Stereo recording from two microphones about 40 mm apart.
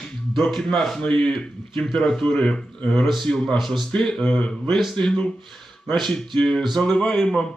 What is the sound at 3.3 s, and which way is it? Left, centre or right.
Speech, centre.